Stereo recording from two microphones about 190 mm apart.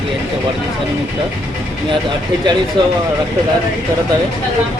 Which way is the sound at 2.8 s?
25° right (ahead or behind).